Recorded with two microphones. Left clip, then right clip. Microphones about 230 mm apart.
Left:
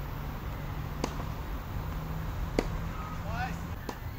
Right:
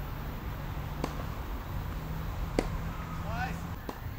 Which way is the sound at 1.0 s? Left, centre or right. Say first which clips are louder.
Left 2 dB; left.